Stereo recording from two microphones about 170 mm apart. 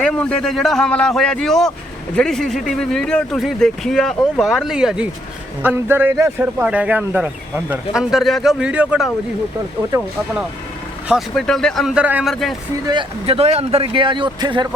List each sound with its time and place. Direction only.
0.0 s speech: 5° left (ahead or behind)
11.1 s speech: centre (ahead or behind)
12.9 s a man's voice: 30° right (ahead or behind)